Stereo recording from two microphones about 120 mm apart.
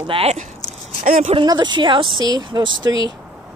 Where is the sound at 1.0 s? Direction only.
90° right.